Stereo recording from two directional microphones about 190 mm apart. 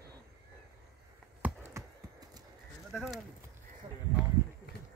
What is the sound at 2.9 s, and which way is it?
Speech, centre (ahead or behind).